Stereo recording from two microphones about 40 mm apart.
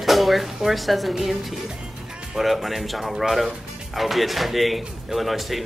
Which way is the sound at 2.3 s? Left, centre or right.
Centre.